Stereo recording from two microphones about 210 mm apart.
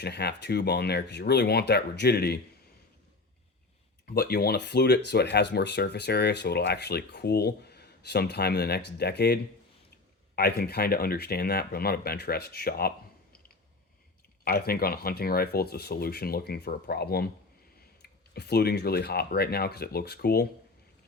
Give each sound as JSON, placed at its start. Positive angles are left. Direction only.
{"t": 0.0, "sound": "speech", "side_deg": 50}
{"t": 4.0, "sound": "speech", "side_deg": 45}
{"t": 14.4, "sound": "speech", "side_deg": 45}